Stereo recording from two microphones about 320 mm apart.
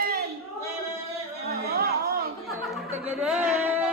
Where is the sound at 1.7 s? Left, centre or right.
Right.